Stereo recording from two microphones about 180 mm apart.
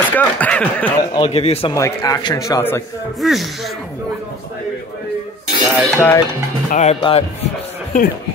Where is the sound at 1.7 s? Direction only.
20° left (ahead or behind).